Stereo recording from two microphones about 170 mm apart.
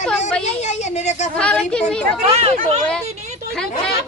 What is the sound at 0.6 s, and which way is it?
Speech, 40° left (ahead or behind).